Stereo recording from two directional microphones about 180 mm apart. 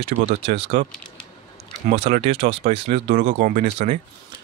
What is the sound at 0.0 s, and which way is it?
Speech, 35° right (ahead or behind).